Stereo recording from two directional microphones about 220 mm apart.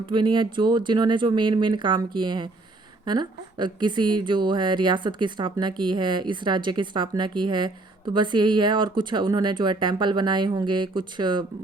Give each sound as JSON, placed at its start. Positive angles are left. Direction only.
{"t": 0.0, "sound": "a woman's voice", "side_deg": -20}